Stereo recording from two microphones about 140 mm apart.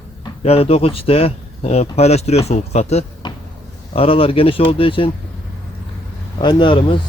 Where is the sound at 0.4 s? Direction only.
45° left (ahead or behind).